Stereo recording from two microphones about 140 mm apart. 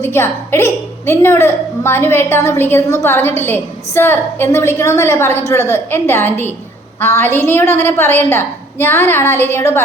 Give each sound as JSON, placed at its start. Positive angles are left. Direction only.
{"t": 0.0, "sound": "a woman's voice", "side_deg": 15}